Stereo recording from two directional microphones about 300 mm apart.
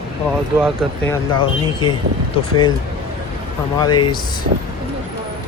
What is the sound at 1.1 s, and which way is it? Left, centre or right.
Speech, centre.